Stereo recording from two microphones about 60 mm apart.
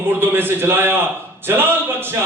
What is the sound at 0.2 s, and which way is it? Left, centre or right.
A man's voice, right.